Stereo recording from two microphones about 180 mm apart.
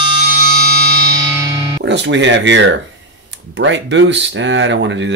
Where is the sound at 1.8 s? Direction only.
85° right.